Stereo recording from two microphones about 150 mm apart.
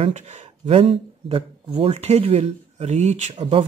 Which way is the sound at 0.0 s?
50° right (ahead or behind).